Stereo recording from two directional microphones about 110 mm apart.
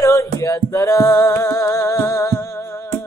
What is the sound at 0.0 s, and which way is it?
Music, 30° left (ahead or behind).